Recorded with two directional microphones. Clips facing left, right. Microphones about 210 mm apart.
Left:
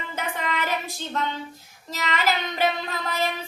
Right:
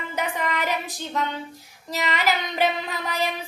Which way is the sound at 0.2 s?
15° right (ahead or behind).